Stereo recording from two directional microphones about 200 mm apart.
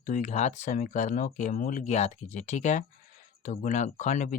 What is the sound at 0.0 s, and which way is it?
Speech, 40° left (ahead or behind).